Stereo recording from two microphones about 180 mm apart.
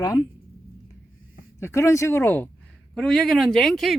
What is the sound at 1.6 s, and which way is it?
Speech, 15° left (ahead or behind).